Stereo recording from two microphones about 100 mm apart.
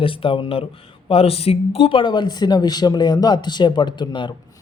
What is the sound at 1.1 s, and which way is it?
Speech, 75° left (ahead or behind).